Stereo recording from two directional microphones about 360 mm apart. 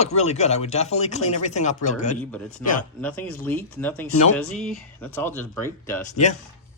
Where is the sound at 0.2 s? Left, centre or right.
Centre.